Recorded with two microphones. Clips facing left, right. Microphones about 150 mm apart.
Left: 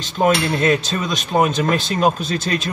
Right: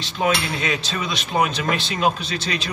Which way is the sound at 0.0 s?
45° left (ahead or behind).